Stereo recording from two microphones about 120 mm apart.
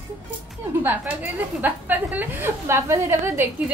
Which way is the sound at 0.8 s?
15° right (ahead or behind).